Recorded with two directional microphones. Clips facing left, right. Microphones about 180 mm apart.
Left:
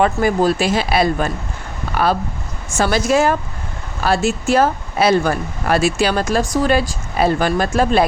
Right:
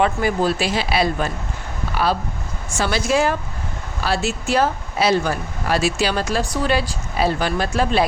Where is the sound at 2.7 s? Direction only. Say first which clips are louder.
Left 4 dB; 45° left (ahead or behind).